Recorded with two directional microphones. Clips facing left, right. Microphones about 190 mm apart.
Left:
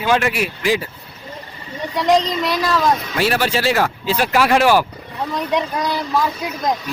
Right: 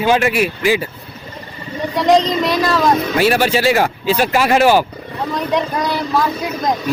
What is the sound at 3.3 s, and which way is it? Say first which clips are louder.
Speech: right 4 dB; 5° right (ahead or behind).